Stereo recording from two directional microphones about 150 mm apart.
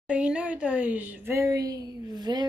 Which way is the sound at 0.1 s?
5° right (ahead or behind).